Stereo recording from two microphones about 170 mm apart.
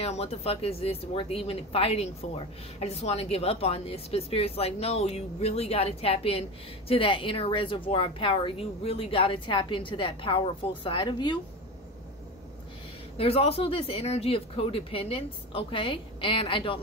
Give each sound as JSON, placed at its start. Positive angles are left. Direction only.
{"t": 0.0, "sound": "speech", "side_deg": 40}
{"t": 13.2, "sound": "speech", "side_deg": 35}